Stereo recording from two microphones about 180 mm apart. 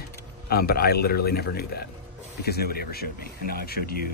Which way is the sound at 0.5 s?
60° left (ahead or behind).